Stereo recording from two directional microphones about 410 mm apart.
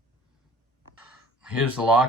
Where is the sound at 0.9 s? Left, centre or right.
Centre.